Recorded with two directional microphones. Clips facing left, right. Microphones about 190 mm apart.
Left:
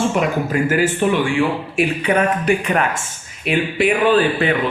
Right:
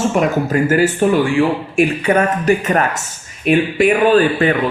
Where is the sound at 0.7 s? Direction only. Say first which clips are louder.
Right 4 dB; 40° right (ahead or behind).